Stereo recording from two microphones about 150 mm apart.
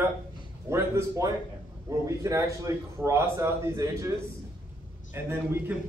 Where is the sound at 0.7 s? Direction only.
20° right (ahead or behind).